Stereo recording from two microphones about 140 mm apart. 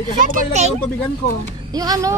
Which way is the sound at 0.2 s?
75° right (ahead or behind).